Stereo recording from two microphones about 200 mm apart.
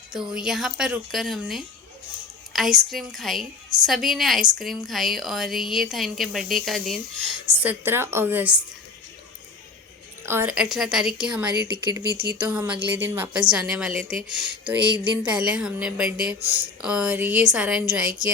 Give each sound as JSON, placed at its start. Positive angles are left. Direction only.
{"t": 0.1, "sound": "a woman's voice", "side_deg": -5}
{"t": 7.6, "sound": "a woman's voice", "side_deg": -10}
{"t": 10.2, "sound": "a woman's voice", "side_deg": -10}